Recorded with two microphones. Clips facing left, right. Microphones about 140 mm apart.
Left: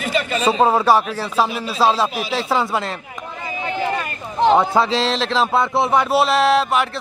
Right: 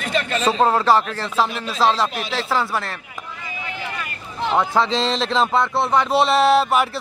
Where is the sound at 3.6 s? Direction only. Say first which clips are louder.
Left 9 dB; 35° left (ahead or behind).